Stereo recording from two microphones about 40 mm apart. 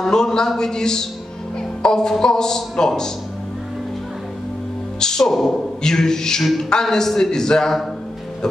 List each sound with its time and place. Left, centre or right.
0.0 s speech: centre
5.0 s speech: centre